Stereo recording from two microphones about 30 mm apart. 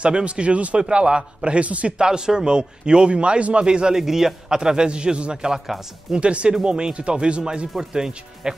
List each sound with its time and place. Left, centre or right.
0.0 s a man's voice: right
2.0 s a man's voice: right
3.6 s speech: right
4.0 s a man's voice: centre
4.6 s a man's voice: right